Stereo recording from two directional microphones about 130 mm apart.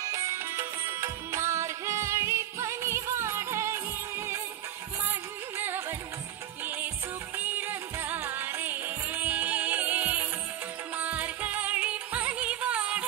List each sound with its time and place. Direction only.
0.0 s music: 25° right (ahead or behind)
5.6 s music: 15° right (ahead or behind)